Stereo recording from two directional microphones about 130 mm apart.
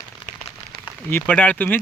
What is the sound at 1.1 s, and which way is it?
Speech, 10° left (ahead or behind).